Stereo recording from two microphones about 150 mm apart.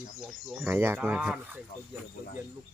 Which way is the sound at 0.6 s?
15° right (ahead or behind).